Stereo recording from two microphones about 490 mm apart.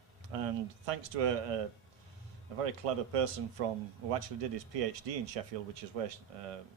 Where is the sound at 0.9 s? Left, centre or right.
Right.